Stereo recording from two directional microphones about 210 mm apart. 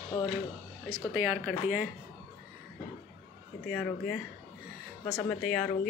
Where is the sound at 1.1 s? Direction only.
5° right (ahead or behind).